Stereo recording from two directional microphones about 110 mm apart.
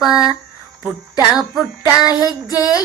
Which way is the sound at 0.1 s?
35° left (ahead or behind).